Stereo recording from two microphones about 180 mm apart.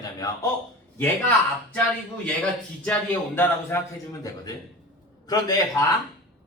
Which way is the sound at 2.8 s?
10° left (ahead or behind).